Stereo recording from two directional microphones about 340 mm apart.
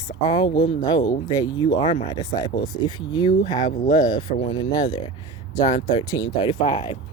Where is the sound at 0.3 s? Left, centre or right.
Centre.